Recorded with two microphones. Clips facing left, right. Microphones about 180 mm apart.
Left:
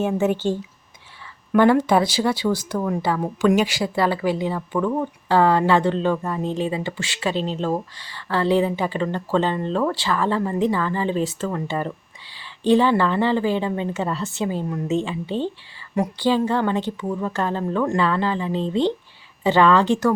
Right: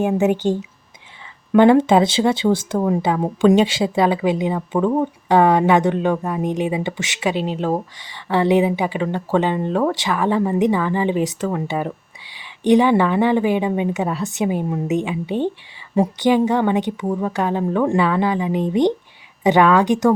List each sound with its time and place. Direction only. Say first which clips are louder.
0.0 s a woman's voice: right 3 dB; 15° right (ahead or behind)